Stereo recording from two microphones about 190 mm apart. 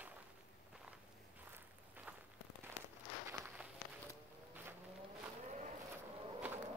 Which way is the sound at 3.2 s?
10° right (ahead or behind).